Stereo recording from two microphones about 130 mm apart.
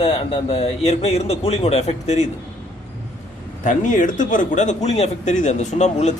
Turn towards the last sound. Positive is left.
turn(degrees=60)  # may be behind; listen again after turning